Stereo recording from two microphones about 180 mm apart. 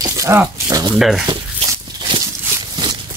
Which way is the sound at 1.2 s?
20° right (ahead or behind).